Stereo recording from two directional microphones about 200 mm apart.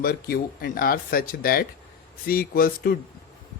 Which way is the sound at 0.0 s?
50° left (ahead or behind).